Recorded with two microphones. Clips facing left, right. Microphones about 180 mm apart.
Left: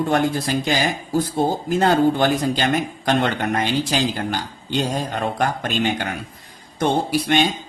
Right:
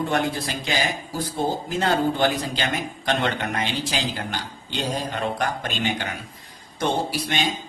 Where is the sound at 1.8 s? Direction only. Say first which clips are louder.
Left 4 dB; 45° left (ahead or behind).